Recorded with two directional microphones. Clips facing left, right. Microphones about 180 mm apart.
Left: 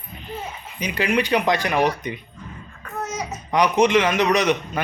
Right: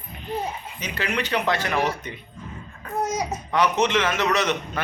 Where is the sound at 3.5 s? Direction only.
15° left (ahead or behind).